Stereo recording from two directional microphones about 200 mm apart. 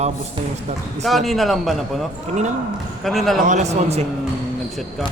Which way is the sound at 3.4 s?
35° right (ahead or behind).